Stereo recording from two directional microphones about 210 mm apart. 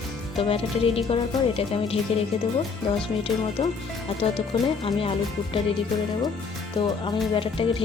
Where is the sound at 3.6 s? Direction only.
25° left (ahead or behind).